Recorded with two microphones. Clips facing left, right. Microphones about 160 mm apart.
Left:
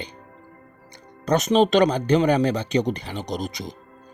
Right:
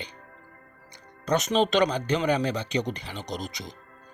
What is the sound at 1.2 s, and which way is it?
Speech, 40° left (ahead or behind).